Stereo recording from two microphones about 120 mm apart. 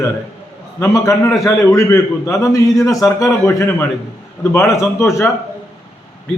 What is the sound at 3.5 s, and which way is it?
Speech, 20° left (ahead or behind).